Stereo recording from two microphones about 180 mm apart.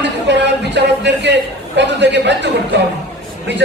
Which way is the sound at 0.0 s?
75° right (ahead or behind).